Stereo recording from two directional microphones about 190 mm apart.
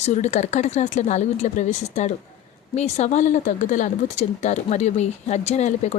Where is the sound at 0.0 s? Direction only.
35° left (ahead or behind).